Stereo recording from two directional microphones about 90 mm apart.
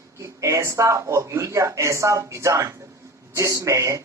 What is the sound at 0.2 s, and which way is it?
A man's voice, 35° right (ahead or behind).